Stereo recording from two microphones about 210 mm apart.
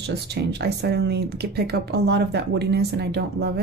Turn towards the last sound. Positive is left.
turn(degrees=-50)  # may be behind; listen again after turning